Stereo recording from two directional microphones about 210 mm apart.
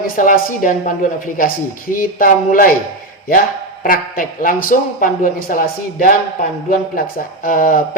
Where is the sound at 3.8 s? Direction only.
40° left (ahead or behind).